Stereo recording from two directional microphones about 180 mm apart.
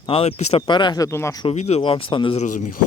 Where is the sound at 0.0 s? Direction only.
30° left (ahead or behind); by 1.5 s 15° left (ahead or behind).